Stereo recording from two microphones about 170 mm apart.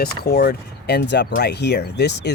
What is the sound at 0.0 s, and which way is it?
Speech, 65° left (ahead or behind).